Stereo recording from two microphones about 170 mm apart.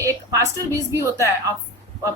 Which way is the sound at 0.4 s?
20° right (ahead or behind).